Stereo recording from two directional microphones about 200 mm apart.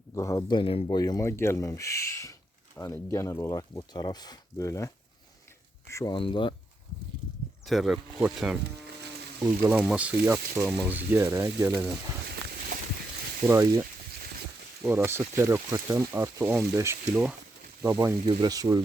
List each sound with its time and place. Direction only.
0.1 s speech: 15° left (ahead or behind)
5.9 s speech: 20° left (ahead or behind)
7.6 s speech: centre (ahead or behind)
13.5 s speech: 10° right (ahead or behind)
14.8 s speech: 10° right (ahead or behind)